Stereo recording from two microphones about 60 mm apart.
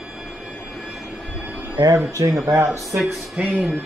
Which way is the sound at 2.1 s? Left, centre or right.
Right.